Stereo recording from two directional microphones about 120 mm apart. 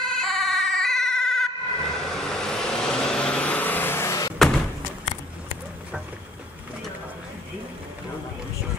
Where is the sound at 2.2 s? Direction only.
5° left (ahead or behind); by 4.3 s 25° left (ahead or behind).